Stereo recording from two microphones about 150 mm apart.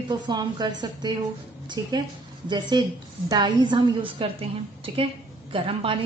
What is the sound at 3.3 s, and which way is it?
A woman's voice, 30° right (ahead or behind).